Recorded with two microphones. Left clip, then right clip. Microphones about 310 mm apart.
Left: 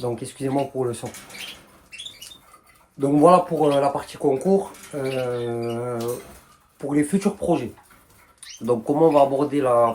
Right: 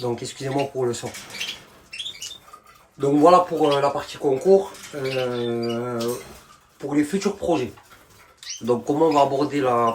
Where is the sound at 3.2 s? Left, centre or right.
Centre.